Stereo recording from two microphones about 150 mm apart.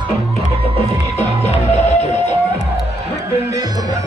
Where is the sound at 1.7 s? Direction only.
45° left (ahead or behind).